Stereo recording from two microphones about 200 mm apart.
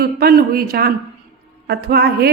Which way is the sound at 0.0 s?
50° right (ahead or behind).